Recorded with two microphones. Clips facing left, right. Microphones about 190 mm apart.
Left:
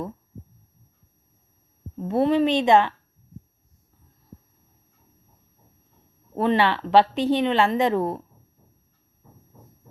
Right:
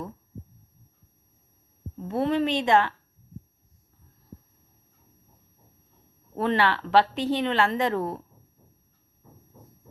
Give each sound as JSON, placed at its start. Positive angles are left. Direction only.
{"t": 2.0, "sound": "a woman's voice", "side_deg": 15}
{"t": 6.3, "sound": "a woman's voice", "side_deg": 20}